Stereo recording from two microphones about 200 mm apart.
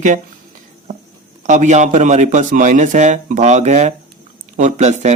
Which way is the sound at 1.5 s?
40° right (ahead or behind).